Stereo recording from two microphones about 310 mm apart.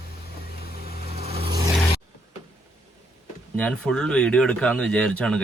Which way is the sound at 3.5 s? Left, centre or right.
Centre.